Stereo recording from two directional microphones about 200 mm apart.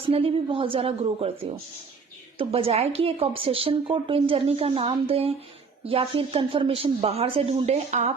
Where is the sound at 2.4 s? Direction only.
30° right (ahead or behind).